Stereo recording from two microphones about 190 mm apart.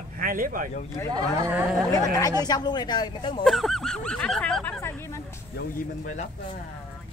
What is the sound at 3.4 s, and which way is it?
Honk, centre (ahead or behind).